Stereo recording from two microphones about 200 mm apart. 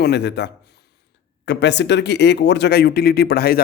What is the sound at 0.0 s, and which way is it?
Speech, 55° left (ahead or behind).